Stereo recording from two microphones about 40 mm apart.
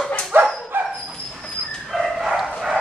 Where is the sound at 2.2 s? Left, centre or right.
Centre.